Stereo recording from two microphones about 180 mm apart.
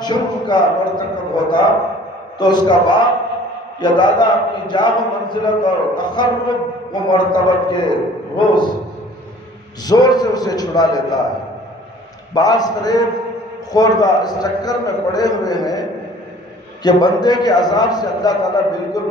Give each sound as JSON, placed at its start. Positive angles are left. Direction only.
{"t": 0.0, "sound": "a man's voice", "side_deg": 25}
{"t": 9.8, "sound": "a man's voice", "side_deg": 20}
{"t": 12.4, "sound": "a man's voice", "side_deg": 20}
{"t": 16.8, "sound": "a man's voice", "side_deg": 25}